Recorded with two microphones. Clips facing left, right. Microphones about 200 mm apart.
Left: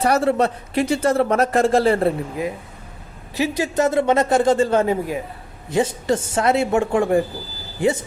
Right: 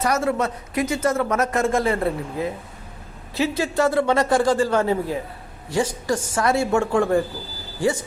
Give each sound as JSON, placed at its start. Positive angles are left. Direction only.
{"t": 0.0, "sound": "speech", "side_deg": 30}
{"t": 3.3, "sound": "a man's voice", "side_deg": 15}